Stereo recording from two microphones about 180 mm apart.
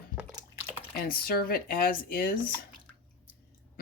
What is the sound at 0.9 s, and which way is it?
Speech, 55° left (ahead or behind).